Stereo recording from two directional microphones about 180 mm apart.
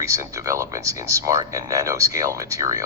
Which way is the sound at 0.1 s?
15° right (ahead or behind).